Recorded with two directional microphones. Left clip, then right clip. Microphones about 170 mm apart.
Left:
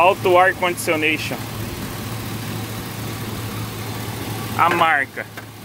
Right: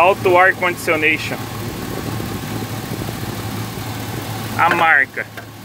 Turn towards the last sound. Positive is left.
turn(degrees=20)  # may be behind; listen again after turning